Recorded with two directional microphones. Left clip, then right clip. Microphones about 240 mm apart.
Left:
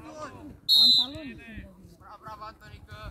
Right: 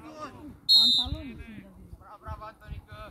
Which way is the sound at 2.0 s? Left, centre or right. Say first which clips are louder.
Left 1 dB; left.